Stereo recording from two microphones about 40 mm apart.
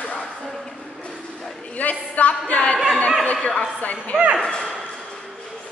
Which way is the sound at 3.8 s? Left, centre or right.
Left.